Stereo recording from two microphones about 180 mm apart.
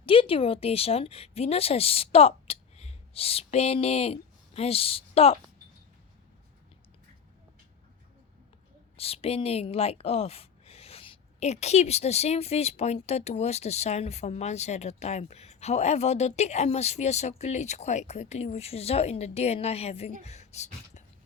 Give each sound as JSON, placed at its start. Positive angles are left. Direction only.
{"t": 0.0, "sound": "a woman's voice", "side_deg": 30}
{"t": 9.0, "sound": "a woman's voice", "side_deg": 35}
{"t": 20.2, "sound": "a sound", "side_deg": 40}